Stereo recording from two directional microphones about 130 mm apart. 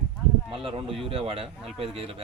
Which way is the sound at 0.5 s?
45° right (ahead or behind).